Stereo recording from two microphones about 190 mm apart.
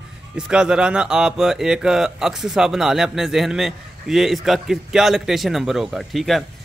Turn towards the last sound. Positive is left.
turn(degrees=0)  # may be behind; listen again after turning